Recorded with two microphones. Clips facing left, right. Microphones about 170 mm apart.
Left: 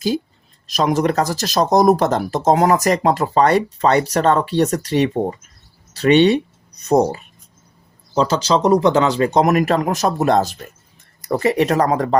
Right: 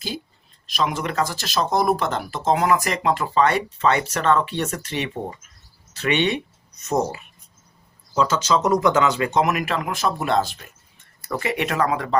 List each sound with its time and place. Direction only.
0.7 s speech: 40° left (ahead or behind)